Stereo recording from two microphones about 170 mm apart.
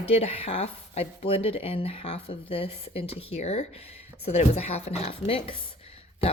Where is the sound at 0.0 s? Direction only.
35° left (ahead or behind).